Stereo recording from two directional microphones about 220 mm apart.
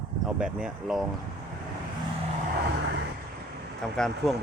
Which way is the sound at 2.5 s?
50° right (ahead or behind).